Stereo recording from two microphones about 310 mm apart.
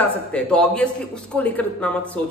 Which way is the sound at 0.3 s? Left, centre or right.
Centre.